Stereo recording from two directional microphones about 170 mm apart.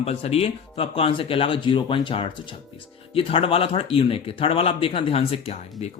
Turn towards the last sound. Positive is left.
turn(degrees=40)  # may be behind; listen again after turning